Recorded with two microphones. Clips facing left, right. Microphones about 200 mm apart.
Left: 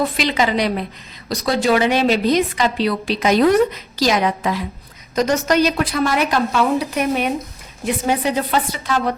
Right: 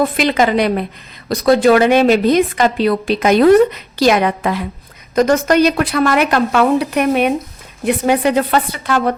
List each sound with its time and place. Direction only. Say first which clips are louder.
0.0 s a woman's voice: right 5 dB; 55° right (ahead or behind)